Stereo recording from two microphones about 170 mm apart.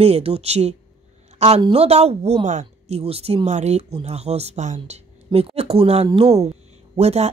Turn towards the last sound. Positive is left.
turn(degrees=-40)  # may be behind; listen again after turning